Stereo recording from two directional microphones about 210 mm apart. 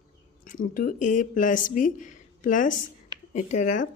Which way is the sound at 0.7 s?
40° left (ahead or behind).